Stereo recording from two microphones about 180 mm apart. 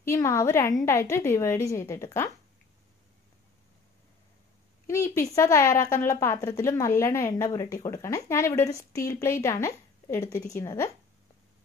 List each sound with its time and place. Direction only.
0.0 s a woman's voice: 15° left (ahead or behind)
4.8 s a woman's voice: 15° left (ahead or behind)